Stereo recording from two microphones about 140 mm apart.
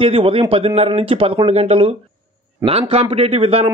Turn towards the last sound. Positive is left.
turn(degrees=-45)  # may be behind; listen again after turning